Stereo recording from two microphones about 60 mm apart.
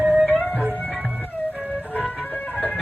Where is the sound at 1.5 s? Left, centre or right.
Right.